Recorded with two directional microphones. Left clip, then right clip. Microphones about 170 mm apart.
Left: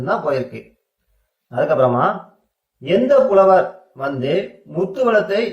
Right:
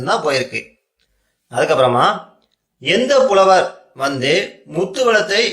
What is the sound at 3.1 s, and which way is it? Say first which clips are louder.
Speech: even; 15° right (ahead or behind).